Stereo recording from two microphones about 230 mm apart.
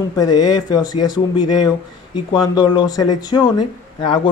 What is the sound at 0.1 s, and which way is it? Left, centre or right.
Speech, centre.